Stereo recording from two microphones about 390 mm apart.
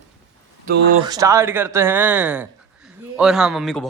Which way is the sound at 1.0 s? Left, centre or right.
Centre.